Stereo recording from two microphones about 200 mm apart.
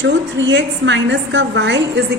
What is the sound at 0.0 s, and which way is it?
A woman's voice, 65° right (ahead or behind).